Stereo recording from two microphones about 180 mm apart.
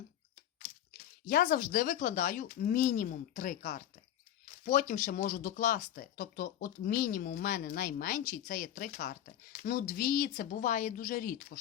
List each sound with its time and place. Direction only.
1.3 s speech: 55° left (ahead or behind)